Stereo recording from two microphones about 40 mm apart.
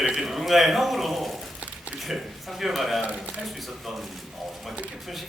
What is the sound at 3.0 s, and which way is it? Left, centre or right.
Speech, right.